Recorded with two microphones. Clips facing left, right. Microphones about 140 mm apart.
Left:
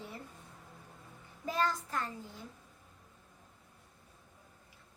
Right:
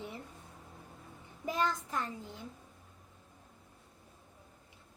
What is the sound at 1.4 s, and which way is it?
Speech, 20° right (ahead or behind).